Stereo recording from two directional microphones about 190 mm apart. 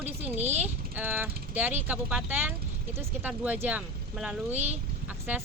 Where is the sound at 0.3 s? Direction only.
35° right (ahead or behind).